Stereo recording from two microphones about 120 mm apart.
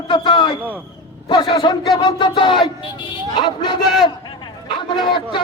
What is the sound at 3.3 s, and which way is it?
A man's voice, 40° left (ahead or behind).